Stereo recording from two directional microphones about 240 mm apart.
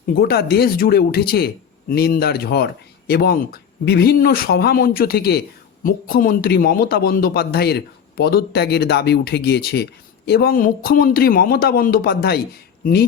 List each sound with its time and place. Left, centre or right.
0.1 s speech: left